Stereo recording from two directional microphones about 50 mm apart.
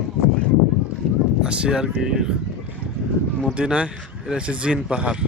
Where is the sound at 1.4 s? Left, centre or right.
Right.